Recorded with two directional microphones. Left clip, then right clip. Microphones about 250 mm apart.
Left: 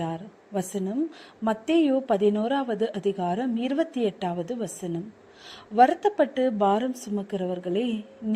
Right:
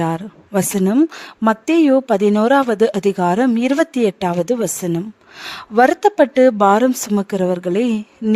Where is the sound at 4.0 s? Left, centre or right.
Right.